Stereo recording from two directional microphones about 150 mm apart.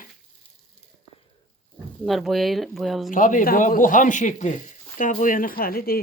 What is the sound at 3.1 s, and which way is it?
Speech, 60° left (ahead or behind).